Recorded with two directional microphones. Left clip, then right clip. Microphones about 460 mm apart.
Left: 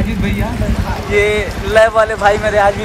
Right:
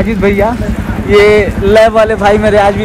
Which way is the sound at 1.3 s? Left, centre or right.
Centre.